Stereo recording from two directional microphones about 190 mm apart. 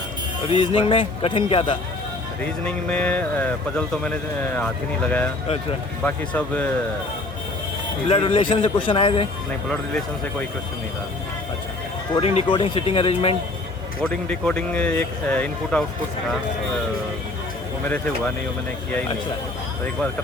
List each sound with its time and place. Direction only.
0.5 s a man's voice: 30° left (ahead or behind)
2.6 s speech: 5° left (ahead or behind)
8.1 s a man's voice: 30° left (ahead or behind)
12.1 s speech: 30° left (ahead or behind)
14.0 s speech: 5° left (ahead or behind)